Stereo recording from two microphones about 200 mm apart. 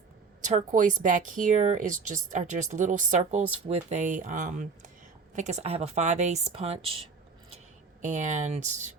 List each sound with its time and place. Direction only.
0.4 s a woman's voice: 40° right (ahead or behind)
8.0 s a woman's voice: 35° right (ahead or behind)